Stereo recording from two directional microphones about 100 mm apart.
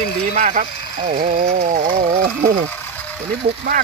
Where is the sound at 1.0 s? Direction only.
80° right.